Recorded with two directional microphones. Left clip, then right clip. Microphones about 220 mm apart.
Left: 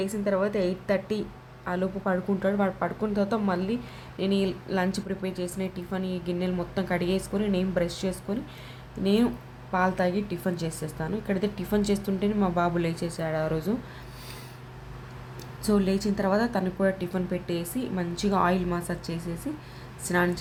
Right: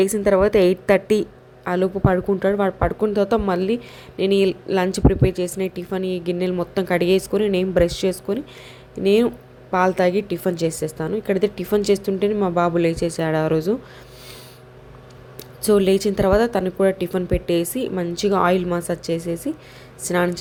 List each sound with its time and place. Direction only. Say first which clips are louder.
0.0 s a woman's voice: right 10 dB; 35° right (ahead or behind)
15.6 s a woman's voice: right 10 dB; 30° right (ahead or behind)